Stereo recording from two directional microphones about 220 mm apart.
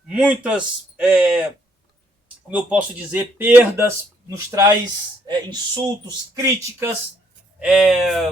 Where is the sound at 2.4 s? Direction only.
5° right (ahead or behind).